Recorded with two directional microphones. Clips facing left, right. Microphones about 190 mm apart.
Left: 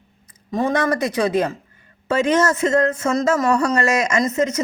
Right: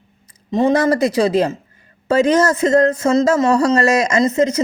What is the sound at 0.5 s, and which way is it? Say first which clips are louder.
Speech: right 5 dB; 25° right (ahead or behind).